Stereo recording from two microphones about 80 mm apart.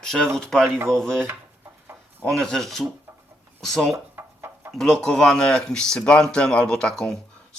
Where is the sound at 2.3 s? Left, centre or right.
Centre.